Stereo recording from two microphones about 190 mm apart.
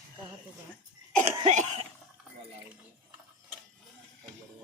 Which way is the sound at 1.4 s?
40° right (ahead or behind).